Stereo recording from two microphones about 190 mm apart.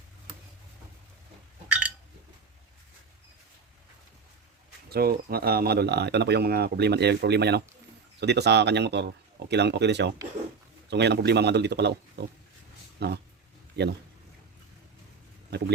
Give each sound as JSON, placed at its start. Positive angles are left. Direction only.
{"t": 1.6, "sound": "a sound", "side_deg": -5}
{"t": 4.9, "sound": "speech", "side_deg": -55}
{"t": 15.4, "sound": "speech", "side_deg": -60}